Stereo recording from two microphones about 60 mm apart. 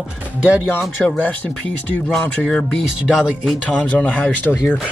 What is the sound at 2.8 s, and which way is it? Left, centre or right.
Speech, centre.